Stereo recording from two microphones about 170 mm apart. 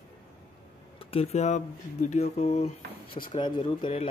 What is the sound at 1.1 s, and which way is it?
Speech, 35° left (ahead or behind).